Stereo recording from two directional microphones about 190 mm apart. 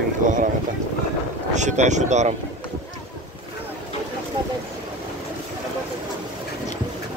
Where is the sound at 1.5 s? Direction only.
40° right (ahead or behind).